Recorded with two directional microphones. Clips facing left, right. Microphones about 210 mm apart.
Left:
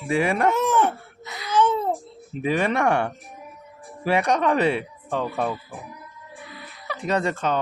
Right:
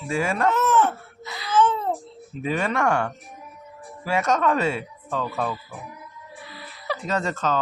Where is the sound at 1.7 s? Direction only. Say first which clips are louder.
Left 2 dB; 10° left (ahead or behind).